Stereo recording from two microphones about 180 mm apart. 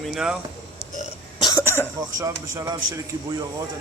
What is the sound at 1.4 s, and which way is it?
Cough, 20° left (ahead or behind).